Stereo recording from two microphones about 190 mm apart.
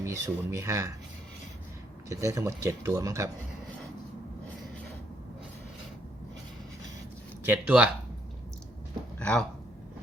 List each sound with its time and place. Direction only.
0.0 s speech: 15° right (ahead or behind)
2.0 s speech: 15° right (ahead or behind)
7.4 s speech: 10° right (ahead or behind)
9.1 s speech: 5° left (ahead or behind)